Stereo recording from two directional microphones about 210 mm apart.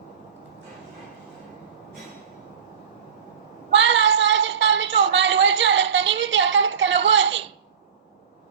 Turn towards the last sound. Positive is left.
turn(degrees=-60)  # may be behind; listen again after turning